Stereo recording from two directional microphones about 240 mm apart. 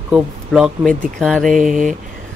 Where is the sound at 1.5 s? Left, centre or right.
Right.